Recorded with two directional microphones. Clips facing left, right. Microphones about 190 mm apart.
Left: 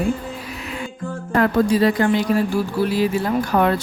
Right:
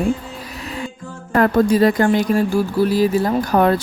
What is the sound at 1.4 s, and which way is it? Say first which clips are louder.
Speech: right 3 dB; 45° right (ahead or behind).